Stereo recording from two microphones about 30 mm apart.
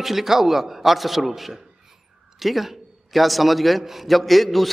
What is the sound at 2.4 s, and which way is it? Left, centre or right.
A man's voice, centre.